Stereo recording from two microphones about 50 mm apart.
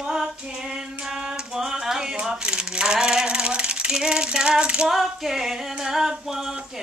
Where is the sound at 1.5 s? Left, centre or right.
Centre.